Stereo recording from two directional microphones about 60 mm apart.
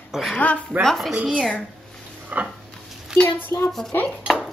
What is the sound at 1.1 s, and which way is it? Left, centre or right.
A woman's voice, right.